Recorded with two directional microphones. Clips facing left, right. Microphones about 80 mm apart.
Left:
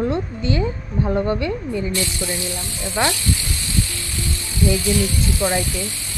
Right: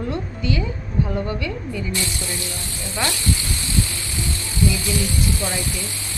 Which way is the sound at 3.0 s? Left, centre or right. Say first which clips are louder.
Left 5 dB; left.